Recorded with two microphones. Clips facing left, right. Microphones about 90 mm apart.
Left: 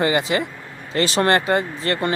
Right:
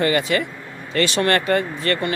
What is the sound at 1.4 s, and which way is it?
Speech, 20° left (ahead or behind).